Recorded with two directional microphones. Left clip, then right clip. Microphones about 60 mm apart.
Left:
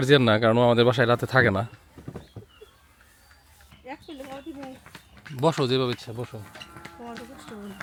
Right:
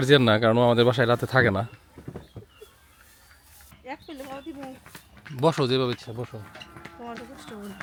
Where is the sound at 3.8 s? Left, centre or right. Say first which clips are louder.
Right 1 dB; right.